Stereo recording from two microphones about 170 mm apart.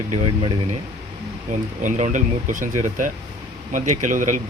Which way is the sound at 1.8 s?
50° right (ahead or behind).